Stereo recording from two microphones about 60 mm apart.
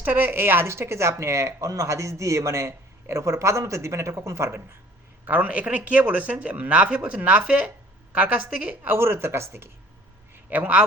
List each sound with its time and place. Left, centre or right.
0.0 s speech: right
5.2 s a man's voice: right
8.7 s speech: right
10.3 s a sound: right